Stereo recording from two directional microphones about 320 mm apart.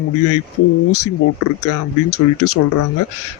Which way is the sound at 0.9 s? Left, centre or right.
Left.